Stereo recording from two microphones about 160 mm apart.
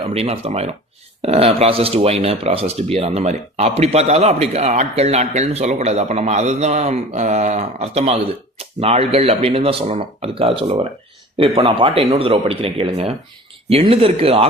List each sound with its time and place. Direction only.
0.0 s speech: 40° right (ahead or behind)